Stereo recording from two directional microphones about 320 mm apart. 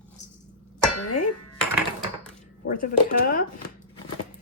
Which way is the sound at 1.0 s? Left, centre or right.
Left.